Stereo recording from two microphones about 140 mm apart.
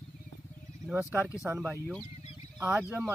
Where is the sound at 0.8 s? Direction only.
15° right (ahead or behind).